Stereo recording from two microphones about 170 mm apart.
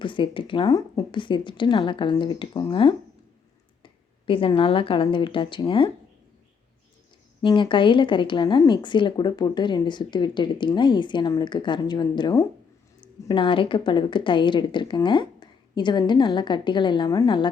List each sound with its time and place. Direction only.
0.0 s a woman's voice: 30° left (ahead or behind)
7.4 s a woman's voice: 30° left (ahead or behind)